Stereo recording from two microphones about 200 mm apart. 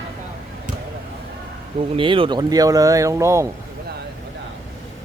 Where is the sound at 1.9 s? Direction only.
25° right (ahead or behind).